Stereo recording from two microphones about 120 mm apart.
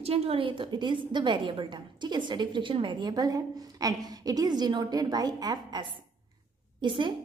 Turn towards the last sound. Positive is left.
turn(degrees=-45)  # may be behind; listen again after turning